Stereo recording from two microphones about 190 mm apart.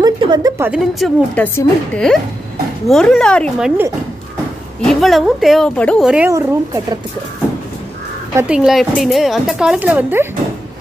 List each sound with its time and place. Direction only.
0.0 s a sound: 20° right (ahead or behind)
0.6 s speech: 5° right (ahead or behind)
4.8 s speech: centre (ahead or behind)
6.3 s speech: 15° right (ahead or behind)
8.4 s speech: 5° right (ahead or behind)